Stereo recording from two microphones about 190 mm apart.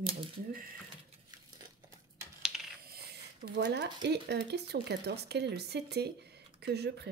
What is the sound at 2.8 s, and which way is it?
Speech, 55° right (ahead or behind).